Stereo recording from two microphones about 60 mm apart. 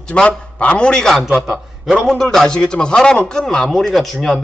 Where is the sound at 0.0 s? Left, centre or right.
Centre.